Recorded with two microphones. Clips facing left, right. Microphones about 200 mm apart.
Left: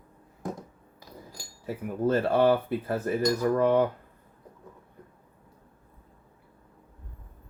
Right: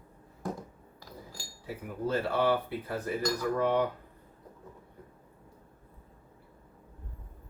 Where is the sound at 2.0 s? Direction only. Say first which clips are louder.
Left 6 dB; 50° left (ahead or behind).